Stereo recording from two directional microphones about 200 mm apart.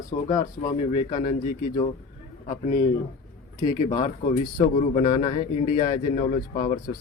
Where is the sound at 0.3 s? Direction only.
20° left (ahead or behind).